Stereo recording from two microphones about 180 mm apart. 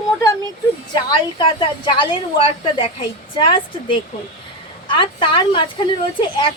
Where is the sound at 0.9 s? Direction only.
25° left (ahead or behind).